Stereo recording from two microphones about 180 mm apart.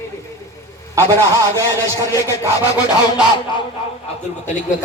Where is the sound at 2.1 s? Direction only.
20° left (ahead or behind).